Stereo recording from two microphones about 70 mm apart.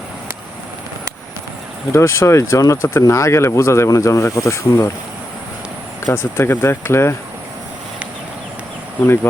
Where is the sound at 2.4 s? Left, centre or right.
Left.